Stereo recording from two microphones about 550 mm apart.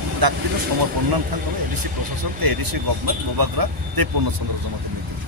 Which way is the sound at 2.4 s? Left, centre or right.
Right.